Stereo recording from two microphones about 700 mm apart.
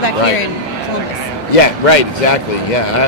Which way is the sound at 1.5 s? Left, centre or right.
Left.